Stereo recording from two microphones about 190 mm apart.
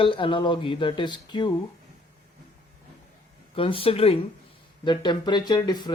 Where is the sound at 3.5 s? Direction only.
30° left (ahead or behind).